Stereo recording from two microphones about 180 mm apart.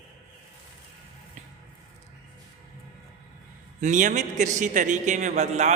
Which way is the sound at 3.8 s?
45° right (ahead or behind).